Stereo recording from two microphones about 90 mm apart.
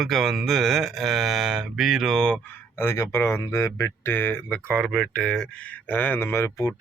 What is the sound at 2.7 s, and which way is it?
Speech, 30° left (ahead or behind).